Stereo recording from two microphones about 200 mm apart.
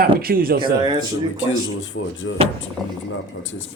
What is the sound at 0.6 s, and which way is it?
Speech, 20° right (ahead or behind).